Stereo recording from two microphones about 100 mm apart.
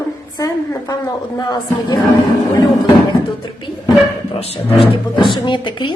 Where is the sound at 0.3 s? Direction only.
35° left (ahead or behind).